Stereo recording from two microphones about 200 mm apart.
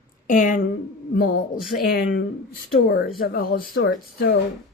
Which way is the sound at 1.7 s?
45° left (ahead or behind).